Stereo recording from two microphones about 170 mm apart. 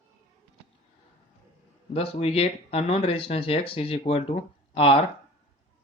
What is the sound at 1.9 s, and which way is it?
Speech, 35° left (ahead or behind).